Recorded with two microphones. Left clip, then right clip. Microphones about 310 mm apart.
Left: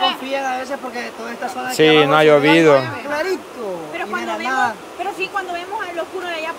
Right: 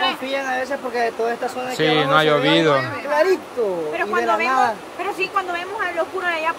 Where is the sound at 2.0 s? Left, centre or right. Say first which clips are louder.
Left 4 dB; centre.